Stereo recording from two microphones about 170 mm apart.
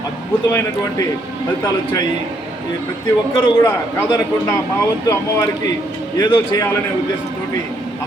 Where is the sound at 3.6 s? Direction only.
20° left (ahead or behind).